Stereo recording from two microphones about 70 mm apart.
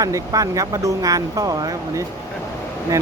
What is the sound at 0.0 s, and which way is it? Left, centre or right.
Speech, right.